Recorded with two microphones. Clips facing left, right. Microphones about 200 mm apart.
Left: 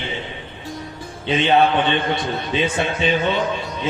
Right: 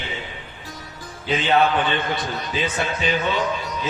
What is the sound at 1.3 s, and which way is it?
A man's voice, 25° left (ahead or behind).